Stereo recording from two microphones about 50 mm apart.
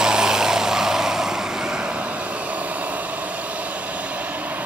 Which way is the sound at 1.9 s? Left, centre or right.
Right.